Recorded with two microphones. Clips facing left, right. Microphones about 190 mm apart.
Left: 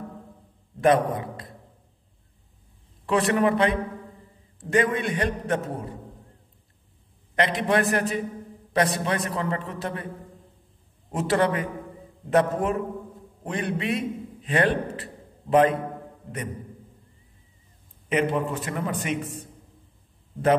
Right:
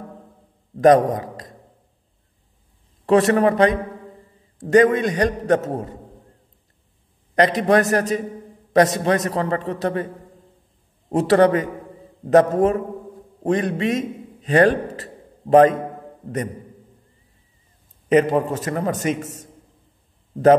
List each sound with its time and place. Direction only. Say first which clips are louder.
0.7 s a man's voice: right 7 dB; 40° right (ahead or behind)
3.1 s a man's voice: right 6 dB; 40° right (ahead or behind)
7.3 s a man's voice: right 6 dB; 40° right (ahead or behind)
11.1 s a man's voice: right 8 dB; 40° right (ahead or behind)
18.0 s a man's voice: right 7 dB; 40° right (ahead or behind)